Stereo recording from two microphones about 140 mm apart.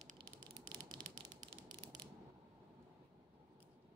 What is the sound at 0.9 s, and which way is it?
Mechanisms, 35° right (ahead or behind).